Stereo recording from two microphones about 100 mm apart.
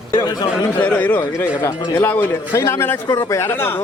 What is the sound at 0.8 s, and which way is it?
A man's voice, 15° left (ahead or behind).